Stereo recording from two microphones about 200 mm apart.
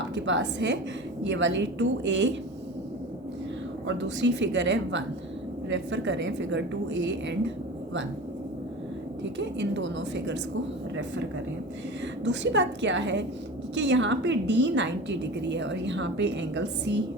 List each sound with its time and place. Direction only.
0.1 s a woman's voice: 65° right (ahead or behind)
3.8 s a woman's voice: 60° right (ahead or behind)
9.4 s a woman's voice: 60° right (ahead or behind)
12.2 s a woman's voice: 60° right (ahead or behind)